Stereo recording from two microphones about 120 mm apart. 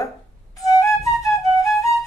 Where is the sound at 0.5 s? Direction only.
30° left (ahead or behind).